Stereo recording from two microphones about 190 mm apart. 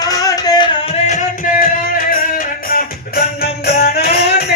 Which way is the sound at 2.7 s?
55° left (ahead or behind).